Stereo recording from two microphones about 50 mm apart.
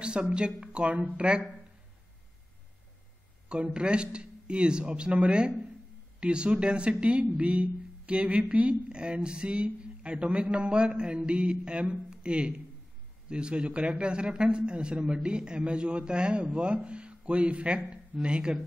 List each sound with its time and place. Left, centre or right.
0.0 s speech: centre
3.4 s a man's voice: centre